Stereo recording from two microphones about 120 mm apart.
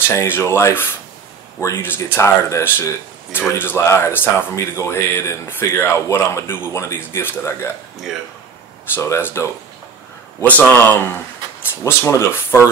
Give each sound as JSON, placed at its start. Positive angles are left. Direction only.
{"t": 0.1, "sound": "speech", "side_deg": 20}
{"t": 8.9, "sound": "speech", "side_deg": 20}
{"t": 10.8, "sound": "speech", "side_deg": 15}